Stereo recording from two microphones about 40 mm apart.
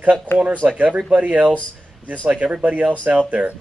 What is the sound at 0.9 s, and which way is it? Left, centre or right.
Speech, right.